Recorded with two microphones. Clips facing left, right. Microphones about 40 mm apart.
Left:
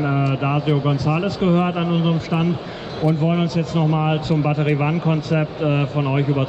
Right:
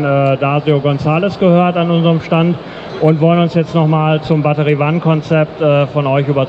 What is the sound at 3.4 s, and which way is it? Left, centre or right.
Speech, right.